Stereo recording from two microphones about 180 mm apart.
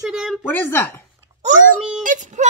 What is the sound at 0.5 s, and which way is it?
Speech, 10° left (ahead or behind).